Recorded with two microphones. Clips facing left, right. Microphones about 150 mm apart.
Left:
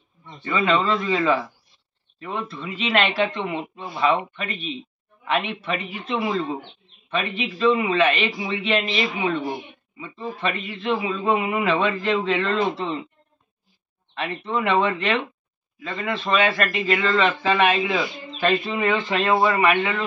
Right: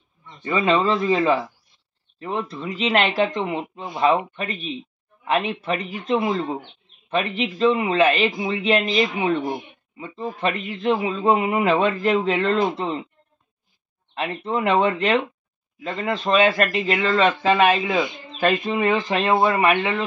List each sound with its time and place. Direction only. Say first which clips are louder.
0.4 s a man's voice: right 2 dB; 35° right (ahead or behind)
14.1 s a man's voice: right 1 dB; 40° right (ahead or behind)
19.2 s speech: even; 25° right (ahead or behind)